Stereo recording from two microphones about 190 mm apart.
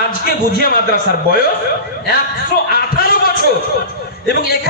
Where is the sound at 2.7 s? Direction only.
50° left (ahead or behind).